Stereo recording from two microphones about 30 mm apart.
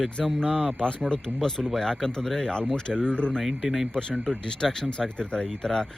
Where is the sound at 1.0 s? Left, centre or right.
Left.